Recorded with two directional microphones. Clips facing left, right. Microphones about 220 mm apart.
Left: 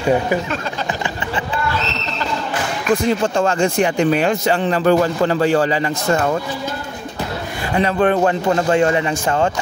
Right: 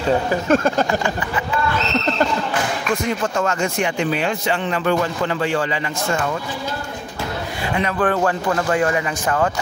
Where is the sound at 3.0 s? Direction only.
30° left (ahead or behind).